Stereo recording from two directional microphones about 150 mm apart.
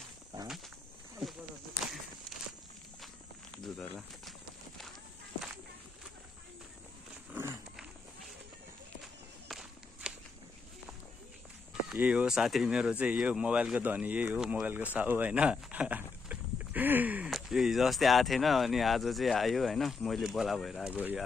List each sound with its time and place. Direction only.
3.5 s speech: 5° left (ahead or behind)
7.3 s a sound: 20° right (ahead or behind)
9.0 s walk: centre (ahead or behind)
11.9 s speech: 10° right (ahead or behind)
15.0 s a sound: 10° right (ahead or behind)
17.3 s speech: centre (ahead or behind)